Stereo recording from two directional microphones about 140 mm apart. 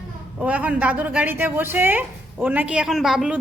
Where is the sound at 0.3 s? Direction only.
10° right (ahead or behind).